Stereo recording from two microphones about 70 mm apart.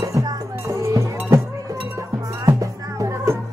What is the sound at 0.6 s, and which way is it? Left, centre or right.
Cowbell, right.